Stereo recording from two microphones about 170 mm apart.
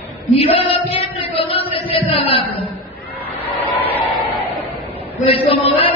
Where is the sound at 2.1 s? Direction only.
35° left (ahead or behind).